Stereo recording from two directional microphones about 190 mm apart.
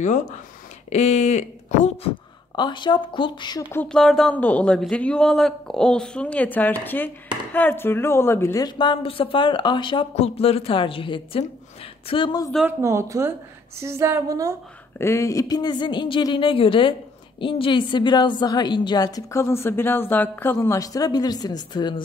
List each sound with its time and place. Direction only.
0.0 s speech: 40° left (ahead or behind)
2.5 s speech: 25° left (ahead or behind)
3.7 s speech: 5° left (ahead or behind); by 12.4 s 25° left (ahead or behind)
12.4 s speech: centre (ahead or behind)
12.8 s a woman's voice: 15° right (ahead or behind)
15.0 s speech: 15° left (ahead or behind)